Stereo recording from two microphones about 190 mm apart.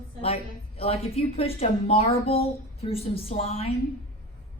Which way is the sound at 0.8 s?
30° left (ahead or behind).